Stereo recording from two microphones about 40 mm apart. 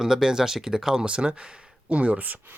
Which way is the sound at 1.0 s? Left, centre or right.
Right.